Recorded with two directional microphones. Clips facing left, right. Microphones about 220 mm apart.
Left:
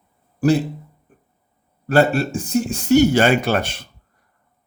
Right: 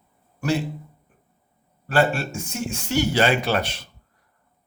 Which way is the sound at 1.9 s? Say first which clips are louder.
Left 5 dB; 40° left (ahead or behind).